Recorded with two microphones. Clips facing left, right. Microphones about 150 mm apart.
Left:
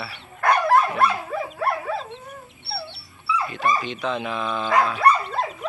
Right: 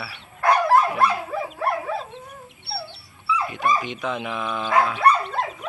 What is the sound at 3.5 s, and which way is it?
Speech, 15° right (ahead or behind).